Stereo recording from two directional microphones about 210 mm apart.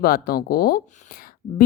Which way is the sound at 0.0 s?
45° left (ahead or behind).